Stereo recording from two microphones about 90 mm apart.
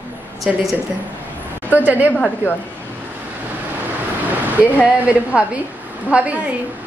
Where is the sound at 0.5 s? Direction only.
5° right (ahead or behind).